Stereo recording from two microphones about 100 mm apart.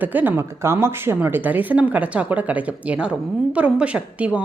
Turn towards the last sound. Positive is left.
turn(degrees=-15)  # may be behind; listen again after turning